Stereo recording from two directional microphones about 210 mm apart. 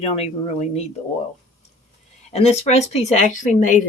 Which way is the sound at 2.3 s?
30° left (ahead or behind).